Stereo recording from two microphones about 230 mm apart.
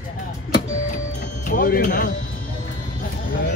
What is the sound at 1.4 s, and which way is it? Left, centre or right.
Speech, left.